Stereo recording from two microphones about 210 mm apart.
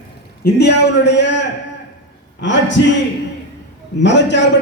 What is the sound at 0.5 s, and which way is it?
A man's voice, 55° left (ahead or behind).